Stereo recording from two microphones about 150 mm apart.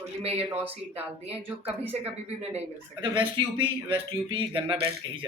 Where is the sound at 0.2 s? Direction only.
45° right (ahead or behind).